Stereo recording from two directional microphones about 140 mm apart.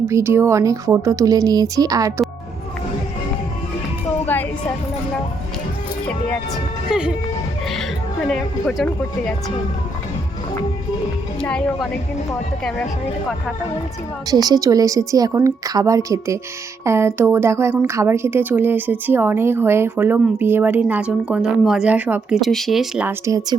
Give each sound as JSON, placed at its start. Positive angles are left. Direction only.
{"t": 0.1, "sound": "speech", "side_deg": -15}
{"t": 4.3, "sound": "music", "side_deg": 15}
{"t": 6.9, "sound": "a woman's voice", "side_deg": -5}
{"t": 8.3, "sound": "speech", "side_deg": 5}
{"t": 11.3, "sound": "speech", "side_deg": 5}
{"t": 14.3, "sound": "a woman's voice", "side_deg": -30}
{"t": 23.0, "sound": "speech", "side_deg": -20}